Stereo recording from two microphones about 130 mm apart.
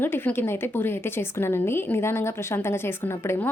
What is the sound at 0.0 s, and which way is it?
A woman's voice, 15° left (ahead or behind).